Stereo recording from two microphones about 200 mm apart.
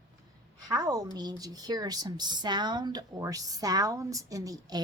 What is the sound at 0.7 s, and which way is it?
Speech, 20° right (ahead or behind).